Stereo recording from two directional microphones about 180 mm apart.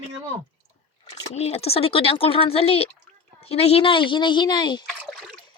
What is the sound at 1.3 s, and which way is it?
A woman's voice, 35° left (ahead or behind).